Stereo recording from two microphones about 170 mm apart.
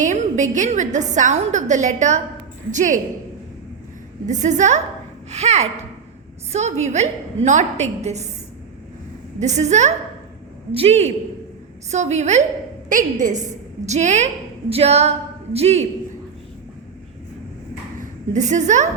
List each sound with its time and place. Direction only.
0.0 s a woman's voice: 45° right (ahead or behind)
4.3 s a woman's voice: 45° right (ahead or behind)
9.4 s a woman's voice: 45° right (ahead or behind)
18.3 s a woman's voice: 45° right (ahead or behind)